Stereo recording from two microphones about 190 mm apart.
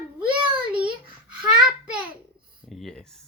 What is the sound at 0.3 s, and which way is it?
Child singing, 25° right (ahead or behind).